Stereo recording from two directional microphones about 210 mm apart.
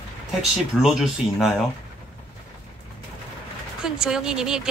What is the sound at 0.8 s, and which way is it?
Speech, centre (ahead or behind).